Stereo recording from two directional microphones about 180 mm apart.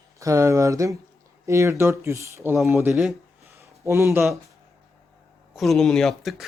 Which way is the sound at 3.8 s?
15° right (ahead or behind).